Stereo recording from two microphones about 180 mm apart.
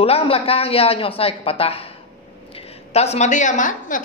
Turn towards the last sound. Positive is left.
turn(degrees=45)  # may be behind; listen again after turning